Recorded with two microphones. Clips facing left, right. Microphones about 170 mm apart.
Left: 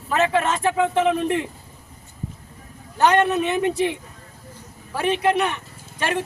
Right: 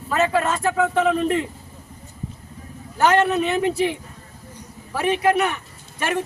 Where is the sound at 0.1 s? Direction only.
20° left (ahead or behind).